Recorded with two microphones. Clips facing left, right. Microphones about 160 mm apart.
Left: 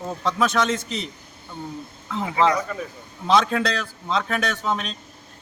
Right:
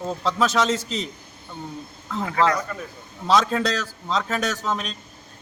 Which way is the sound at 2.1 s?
15° left (ahead or behind).